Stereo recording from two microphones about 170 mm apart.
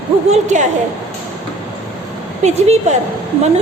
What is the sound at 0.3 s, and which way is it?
Speech, 45° right (ahead or behind).